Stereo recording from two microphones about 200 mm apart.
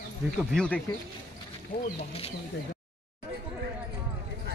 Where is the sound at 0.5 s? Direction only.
5° left (ahead or behind).